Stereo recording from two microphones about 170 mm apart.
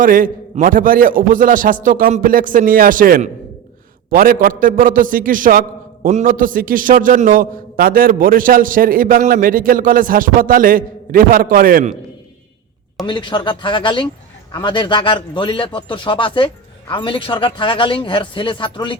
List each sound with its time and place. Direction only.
0.0 s a man's voice: 55° right (ahead or behind)
13.1 s a man's voice: 25° left (ahead or behind)